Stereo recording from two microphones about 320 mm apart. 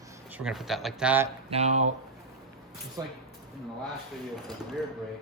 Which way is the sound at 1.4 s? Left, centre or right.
Centre.